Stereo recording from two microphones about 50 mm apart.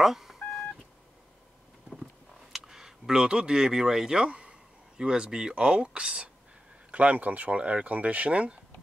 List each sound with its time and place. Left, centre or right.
0.0 s telephone dialing: centre
2.5 s speech: centre; by 8.5 s right